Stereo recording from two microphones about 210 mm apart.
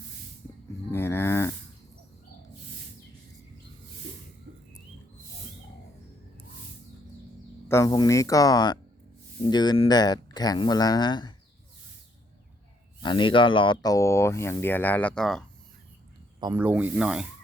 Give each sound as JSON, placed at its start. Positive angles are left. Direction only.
{"t": 0.9, "sound": "livestock", "side_deg": 10}
{"t": 4.5, "sound": "bird", "side_deg": -40}
{"t": 7.7, "sound": "speech", "side_deg": 15}
{"t": 13.0, "sound": "speech", "side_deg": 20}
{"t": 16.4, "sound": "speech", "side_deg": -10}